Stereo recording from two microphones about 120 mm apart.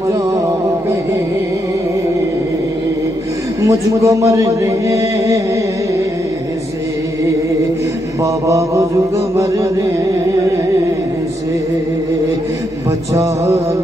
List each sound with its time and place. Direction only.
3.6 s a man's voice: 25° right (ahead or behind)
8.2 s mantra: 25° right (ahead or behind)
13.1 s a man's voice: 25° right (ahead or behind)